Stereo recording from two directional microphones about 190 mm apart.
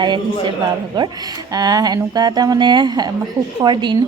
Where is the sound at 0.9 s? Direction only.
25° right (ahead or behind).